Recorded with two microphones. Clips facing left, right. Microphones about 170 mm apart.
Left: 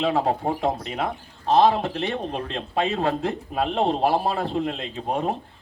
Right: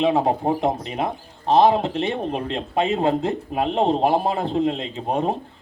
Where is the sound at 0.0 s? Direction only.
20° right (ahead or behind).